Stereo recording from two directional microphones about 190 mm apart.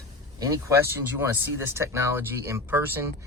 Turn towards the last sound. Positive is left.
turn(degrees=-10)  # may be behind; listen again after turning